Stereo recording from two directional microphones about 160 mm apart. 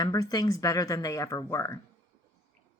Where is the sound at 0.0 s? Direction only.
25° left (ahead or behind).